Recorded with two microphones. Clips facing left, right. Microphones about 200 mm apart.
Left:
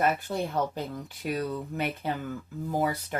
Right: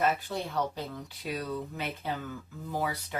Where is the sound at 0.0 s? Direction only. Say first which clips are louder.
Left 2 dB; 50° left (ahead or behind).